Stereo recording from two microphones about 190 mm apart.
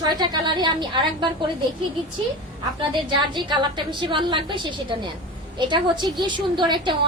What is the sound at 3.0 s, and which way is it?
A woman's voice, 25° right (ahead or behind).